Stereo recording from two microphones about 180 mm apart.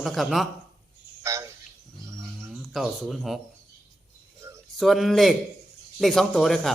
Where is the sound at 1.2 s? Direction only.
15° right (ahead or behind).